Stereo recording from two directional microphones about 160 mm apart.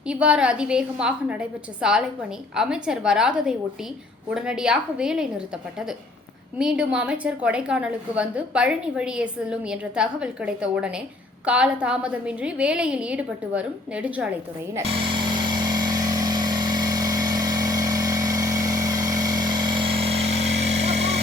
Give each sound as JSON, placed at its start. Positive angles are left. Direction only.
{"t": 0.1, "sound": "a woman's voice", "side_deg": -5}
{"t": 6.6, "sound": "a woman's voice", "side_deg": -5}
{"t": 14.8, "sound": "vehicle", "side_deg": -35}